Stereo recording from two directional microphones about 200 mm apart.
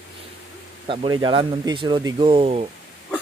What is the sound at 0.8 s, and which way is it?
Speech, 25° right (ahead or behind).